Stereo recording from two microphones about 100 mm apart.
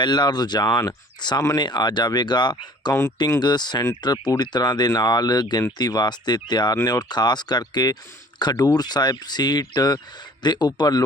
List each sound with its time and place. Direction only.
0.0 s speech: 45° left (ahead or behind)